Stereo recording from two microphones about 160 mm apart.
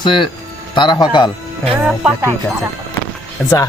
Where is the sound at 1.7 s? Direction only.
10° right (ahead or behind).